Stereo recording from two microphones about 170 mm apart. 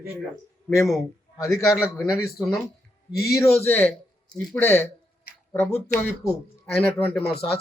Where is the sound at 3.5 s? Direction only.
10° left (ahead or behind).